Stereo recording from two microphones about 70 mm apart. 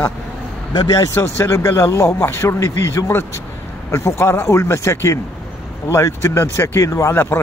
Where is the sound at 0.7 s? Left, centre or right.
Left.